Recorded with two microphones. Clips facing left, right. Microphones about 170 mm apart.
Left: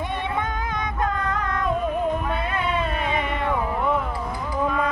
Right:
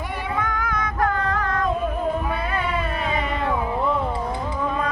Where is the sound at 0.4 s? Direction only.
20° left (ahead or behind).